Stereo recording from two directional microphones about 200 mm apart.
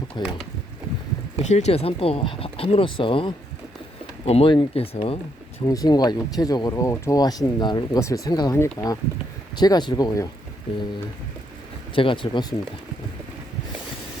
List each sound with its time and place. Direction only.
0.2 s speech: 20° left (ahead or behind)
1.5 s speech: 35° left (ahead or behind)
11.9 s speech: 25° left (ahead or behind)